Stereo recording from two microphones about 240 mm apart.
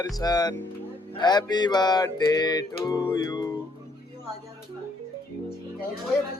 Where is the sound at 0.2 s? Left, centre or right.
Centre.